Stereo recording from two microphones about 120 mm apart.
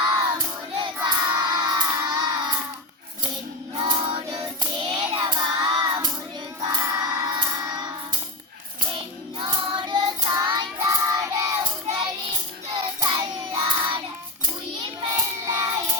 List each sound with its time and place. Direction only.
0.0 s child singing: 40° right (ahead or behind)
3.8 s child singing: 40° right (ahead or behind)
8.8 s child singing: 45° right (ahead or behind); by 11.7 s 25° right (ahead or behind)
12.7 s child singing: 40° right (ahead or behind)
15.1 s child singing: 25° right (ahead or behind)